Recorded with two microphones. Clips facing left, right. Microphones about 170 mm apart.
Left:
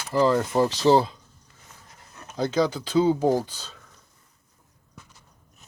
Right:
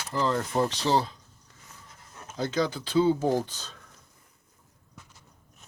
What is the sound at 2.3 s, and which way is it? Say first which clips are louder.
Speech: left 4 dB; 15° left (ahead or behind).